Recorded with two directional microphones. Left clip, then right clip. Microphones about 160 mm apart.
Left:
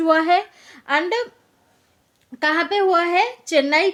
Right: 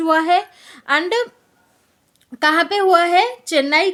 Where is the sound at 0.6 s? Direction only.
20° right (ahead or behind).